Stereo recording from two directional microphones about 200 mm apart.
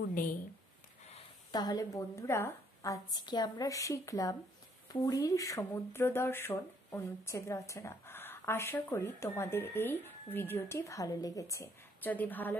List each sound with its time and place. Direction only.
1.5 s speech: 20° left (ahead or behind)